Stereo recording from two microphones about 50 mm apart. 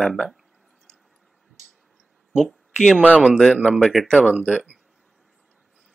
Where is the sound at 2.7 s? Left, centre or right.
Centre.